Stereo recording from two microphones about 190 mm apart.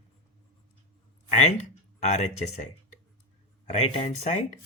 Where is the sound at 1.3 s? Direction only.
40° left (ahead or behind).